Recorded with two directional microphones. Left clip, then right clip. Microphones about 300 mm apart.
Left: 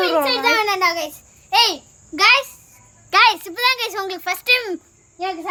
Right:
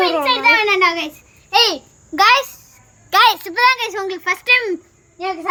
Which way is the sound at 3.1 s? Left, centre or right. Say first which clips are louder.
Right 1 dB; right.